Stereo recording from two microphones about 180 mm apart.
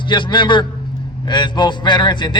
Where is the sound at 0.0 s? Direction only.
25° left (ahead or behind).